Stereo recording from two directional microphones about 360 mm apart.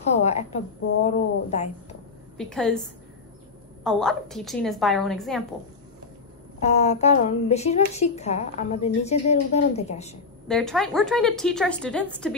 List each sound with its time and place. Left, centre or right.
0.1 s a woman's voice: centre
2.3 s a woman's voice: centre
6.6 s a woman's voice: centre
10.5 s a woman's voice: centre